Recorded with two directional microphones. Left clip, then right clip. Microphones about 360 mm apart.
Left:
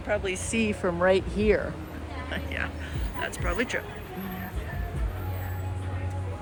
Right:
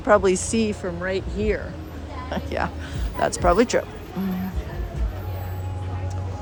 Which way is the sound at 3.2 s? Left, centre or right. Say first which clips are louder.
Right 12 dB; centre.